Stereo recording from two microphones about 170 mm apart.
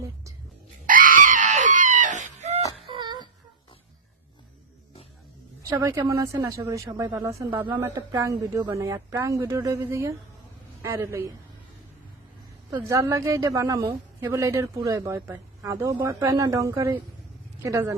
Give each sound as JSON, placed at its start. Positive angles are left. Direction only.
{"t": 0.9, "sound": "chicken", "side_deg": -55}
{"t": 2.8, "sound": "wail", "side_deg": -30}
{"t": 5.6, "sound": "a woman's voice", "side_deg": -20}
{"t": 12.7, "sound": "a woman's voice", "side_deg": -15}